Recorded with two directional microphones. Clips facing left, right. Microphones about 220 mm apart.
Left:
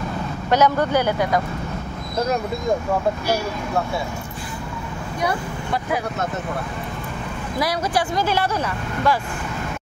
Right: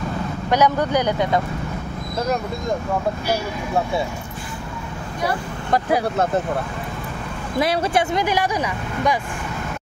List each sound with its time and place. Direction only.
0.5 s speech: 15° right (ahead or behind)
5.7 s speech: 35° right (ahead or behind)
7.5 s speech: 25° right (ahead or behind)